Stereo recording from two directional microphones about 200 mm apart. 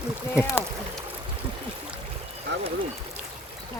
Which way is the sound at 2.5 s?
60° right (ahead or behind).